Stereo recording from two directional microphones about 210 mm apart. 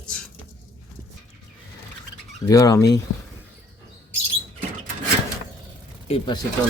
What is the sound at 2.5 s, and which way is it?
Speech, 15° left (ahead or behind).